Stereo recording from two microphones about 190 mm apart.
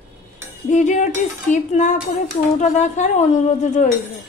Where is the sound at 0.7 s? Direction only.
40° left (ahead or behind).